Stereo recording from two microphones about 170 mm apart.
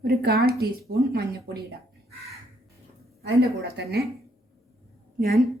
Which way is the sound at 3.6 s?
70° right (ahead or behind).